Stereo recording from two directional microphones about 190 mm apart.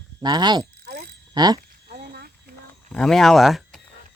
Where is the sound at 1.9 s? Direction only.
55° right (ahead or behind).